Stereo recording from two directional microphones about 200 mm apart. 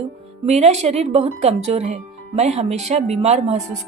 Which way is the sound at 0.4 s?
30° right (ahead or behind).